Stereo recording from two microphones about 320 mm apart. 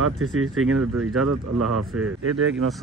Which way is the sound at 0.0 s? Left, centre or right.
Right.